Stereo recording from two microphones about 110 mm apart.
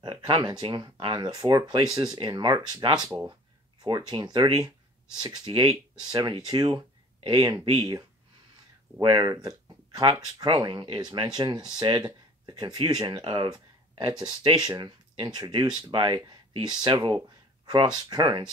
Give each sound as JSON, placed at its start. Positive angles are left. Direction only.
{"t": 0.0, "sound": "speech", "side_deg": -45}
{"t": 9.0, "sound": "speech", "side_deg": -40}